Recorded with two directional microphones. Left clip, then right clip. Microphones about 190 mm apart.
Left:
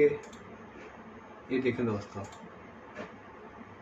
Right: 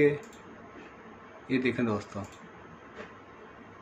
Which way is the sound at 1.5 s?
40° right (ahead or behind).